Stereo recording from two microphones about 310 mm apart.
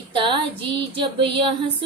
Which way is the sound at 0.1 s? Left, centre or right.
Centre.